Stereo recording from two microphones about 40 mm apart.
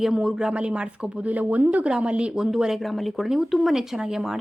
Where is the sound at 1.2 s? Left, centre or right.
Right.